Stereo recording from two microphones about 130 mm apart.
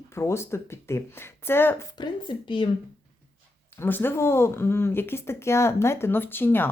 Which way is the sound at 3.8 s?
15° left (ahead or behind).